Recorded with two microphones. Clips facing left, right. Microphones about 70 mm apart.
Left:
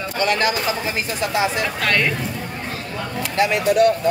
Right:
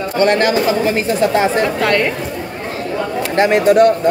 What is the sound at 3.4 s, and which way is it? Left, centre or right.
Speech, right.